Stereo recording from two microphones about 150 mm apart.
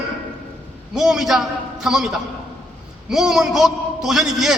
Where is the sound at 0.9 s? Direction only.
Centre (ahead or behind).